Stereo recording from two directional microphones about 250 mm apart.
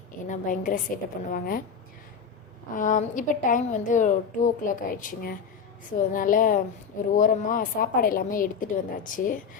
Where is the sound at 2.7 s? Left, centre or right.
Left.